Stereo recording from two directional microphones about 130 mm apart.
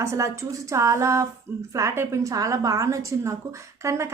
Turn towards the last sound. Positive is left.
turn(degrees=-20)  # may be behind; listen again after turning